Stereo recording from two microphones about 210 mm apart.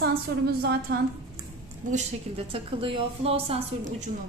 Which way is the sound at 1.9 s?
30° right (ahead or behind).